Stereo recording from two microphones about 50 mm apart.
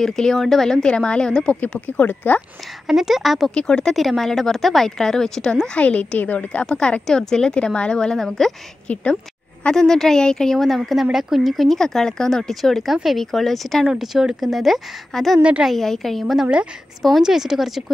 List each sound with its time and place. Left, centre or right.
0.0 s speech: centre
0.8 s a woman's voice: centre
1.9 s a woman's voice: left
2.9 s speech: centre
3.5 s speech: centre
3.9 s speech: centre
5.8 s a woman's voice: left
6.7 s a woman's voice: left
8.8 s a woman's voice: left
9.8 s speech: centre
13.8 s speech: centre